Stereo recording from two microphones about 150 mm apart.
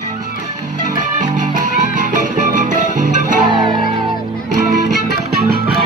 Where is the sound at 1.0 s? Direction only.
55° right (ahead or behind).